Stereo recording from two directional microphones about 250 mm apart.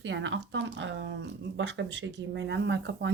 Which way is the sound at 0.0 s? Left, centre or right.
Right.